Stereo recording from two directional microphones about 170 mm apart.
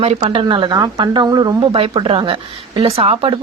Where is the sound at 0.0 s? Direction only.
35° right (ahead or behind).